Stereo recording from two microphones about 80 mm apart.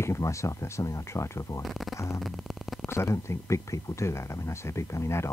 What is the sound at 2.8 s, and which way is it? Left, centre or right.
Speech, left.